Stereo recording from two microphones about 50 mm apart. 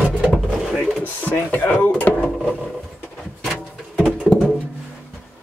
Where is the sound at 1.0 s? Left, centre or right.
Left.